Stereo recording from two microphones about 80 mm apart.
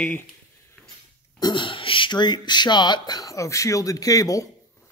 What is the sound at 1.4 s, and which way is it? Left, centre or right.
Speech, left.